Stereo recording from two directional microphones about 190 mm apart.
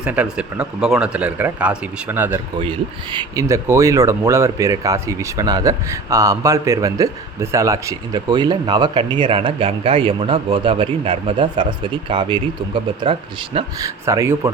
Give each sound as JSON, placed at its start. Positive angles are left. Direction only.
{"t": 0.0, "sound": "speech", "side_deg": -5}
{"t": 2.6, "sound": "a man's voice", "side_deg": -25}
{"t": 13.7, "sound": "speech", "side_deg": -15}